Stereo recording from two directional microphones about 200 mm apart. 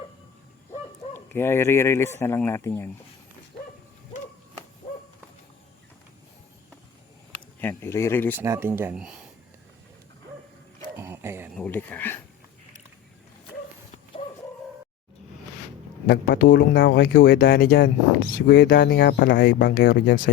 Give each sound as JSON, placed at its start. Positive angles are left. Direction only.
{"t": 1.1, "sound": "speech", "side_deg": 10}
{"t": 7.6, "sound": "speech", "side_deg": 10}
{"t": 8.4, "sound": "speech", "side_deg": -10}
{"t": 10.9, "sound": "a sound", "side_deg": -10}
{"t": 11.5, "sound": "speech", "side_deg": 5}
{"t": 16.0, "sound": "speech", "side_deg": 50}
{"t": 18.5, "sound": "speech", "side_deg": 55}